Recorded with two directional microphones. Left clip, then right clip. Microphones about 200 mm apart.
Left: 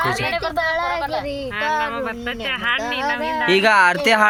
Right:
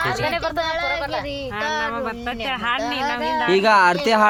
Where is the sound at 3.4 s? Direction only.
5° left (ahead or behind).